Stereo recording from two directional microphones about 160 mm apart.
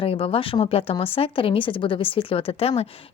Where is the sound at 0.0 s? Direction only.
35° left (ahead or behind).